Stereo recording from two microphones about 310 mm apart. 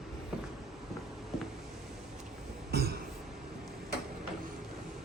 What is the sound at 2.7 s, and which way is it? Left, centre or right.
Cough, right.